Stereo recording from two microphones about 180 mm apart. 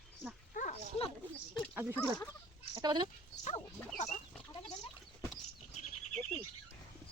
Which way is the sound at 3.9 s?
40° left (ahead or behind).